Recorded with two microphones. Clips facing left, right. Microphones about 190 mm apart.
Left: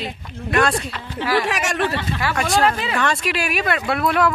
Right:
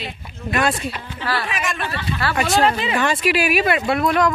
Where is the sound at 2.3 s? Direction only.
Centre (ahead or behind).